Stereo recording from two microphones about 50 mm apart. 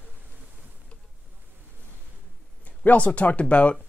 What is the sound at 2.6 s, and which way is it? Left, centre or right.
Speech, left.